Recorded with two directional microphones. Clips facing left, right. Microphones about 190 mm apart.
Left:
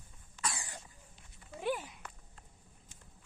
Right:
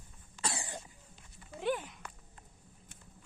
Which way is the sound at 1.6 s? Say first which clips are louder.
Right 2 dB; 10° left (ahead or behind).